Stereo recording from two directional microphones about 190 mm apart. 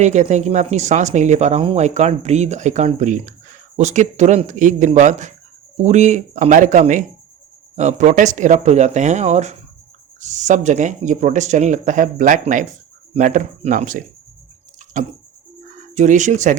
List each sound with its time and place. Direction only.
0.0 s speech: 40° right (ahead or behind)